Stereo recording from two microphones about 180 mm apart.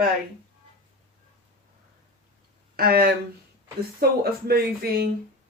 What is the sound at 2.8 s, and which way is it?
Speech, 55° right (ahead or behind).